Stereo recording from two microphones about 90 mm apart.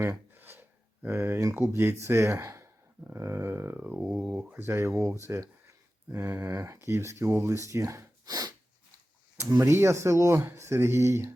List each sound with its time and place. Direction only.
0.0 s gasp: 25° right (ahead or behind)
1.0 s speech: 30° right (ahead or behind); by 8.5 s 45° right (ahead or behind)
9.4 s speech: 30° right (ahead or behind)